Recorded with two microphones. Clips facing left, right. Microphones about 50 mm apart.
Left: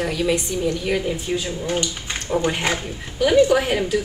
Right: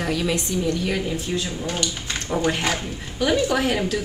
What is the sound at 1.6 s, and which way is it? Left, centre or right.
A woman's voice, left.